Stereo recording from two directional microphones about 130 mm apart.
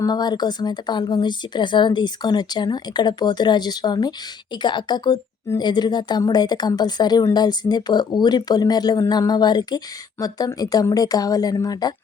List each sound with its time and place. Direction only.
0.0 s a woman's voice: 30° left (ahead or behind)